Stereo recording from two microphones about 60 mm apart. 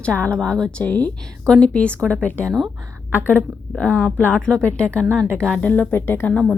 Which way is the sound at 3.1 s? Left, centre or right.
Left.